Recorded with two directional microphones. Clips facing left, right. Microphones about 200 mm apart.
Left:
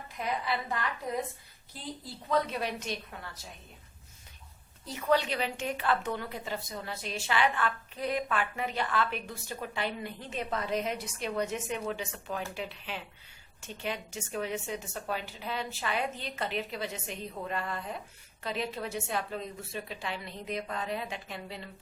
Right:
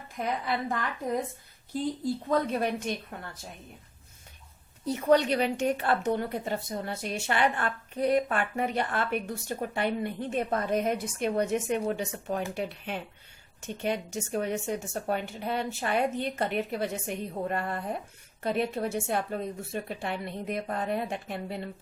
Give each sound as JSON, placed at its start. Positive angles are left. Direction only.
{"t": 0.2, "sound": "a woman's voice", "side_deg": -45}
{"t": 2.0, "sound": "a woman's voice", "side_deg": -50}
{"t": 5.0, "sound": "a woman's voice", "side_deg": -45}